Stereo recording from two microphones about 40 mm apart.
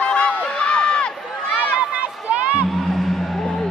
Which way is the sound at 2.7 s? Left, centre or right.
Centre.